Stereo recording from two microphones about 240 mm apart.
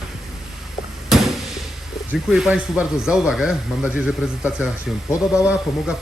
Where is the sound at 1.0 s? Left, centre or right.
Centre.